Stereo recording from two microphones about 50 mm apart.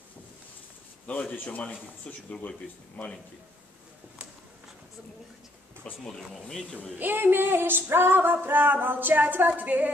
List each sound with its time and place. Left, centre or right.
1.3 s a man's voice: left
6.0 s speech: centre
7.0 s music: right